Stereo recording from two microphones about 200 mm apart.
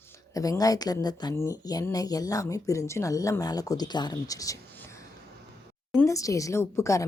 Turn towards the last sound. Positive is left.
turn(degrees=15)  # may be behind; listen again after turning